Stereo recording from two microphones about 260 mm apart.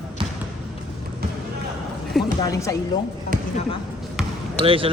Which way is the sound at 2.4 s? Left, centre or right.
Centre.